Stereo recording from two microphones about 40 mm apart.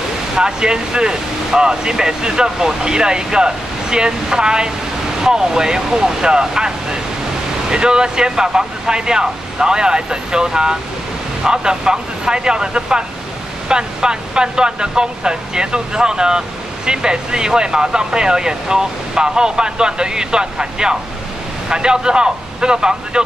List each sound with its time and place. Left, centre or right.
0.4 s speech: centre